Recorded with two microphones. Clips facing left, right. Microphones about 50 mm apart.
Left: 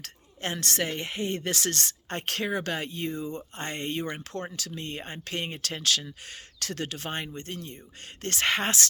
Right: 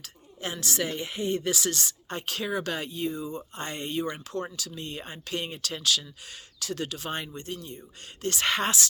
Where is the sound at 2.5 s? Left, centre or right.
Left.